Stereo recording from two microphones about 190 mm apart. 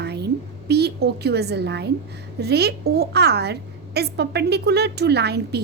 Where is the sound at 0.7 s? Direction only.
60° right (ahead or behind).